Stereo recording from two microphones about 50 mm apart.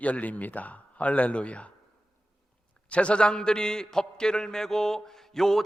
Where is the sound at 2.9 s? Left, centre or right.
Left.